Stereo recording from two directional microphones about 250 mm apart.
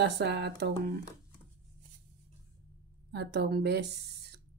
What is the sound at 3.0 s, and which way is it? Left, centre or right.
Speech, right.